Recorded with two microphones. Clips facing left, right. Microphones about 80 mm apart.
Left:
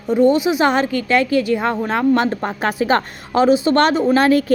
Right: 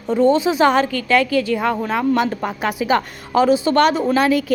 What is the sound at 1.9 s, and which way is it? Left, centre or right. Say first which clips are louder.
A woman's voice: left 5 dB; left.